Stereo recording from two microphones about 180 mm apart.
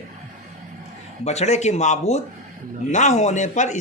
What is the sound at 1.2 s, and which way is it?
A man's voice, 35° left (ahead or behind).